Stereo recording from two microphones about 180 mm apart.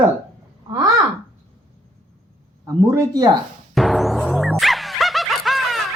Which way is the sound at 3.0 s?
20° right (ahead or behind).